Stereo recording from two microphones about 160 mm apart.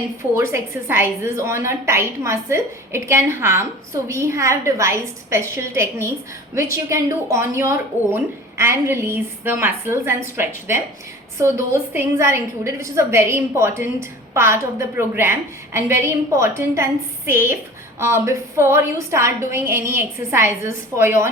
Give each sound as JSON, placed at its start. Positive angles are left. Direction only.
{"t": 0.2, "sound": "a woman's voice", "side_deg": -15}